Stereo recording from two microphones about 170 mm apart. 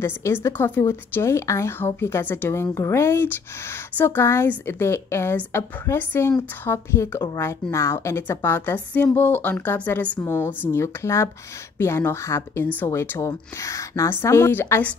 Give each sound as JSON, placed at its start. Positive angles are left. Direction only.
{"t": 0.0, "sound": "a woman's voice", "side_deg": 15}